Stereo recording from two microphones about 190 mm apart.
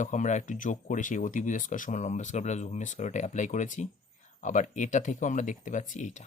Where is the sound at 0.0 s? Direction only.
40° left (ahead or behind).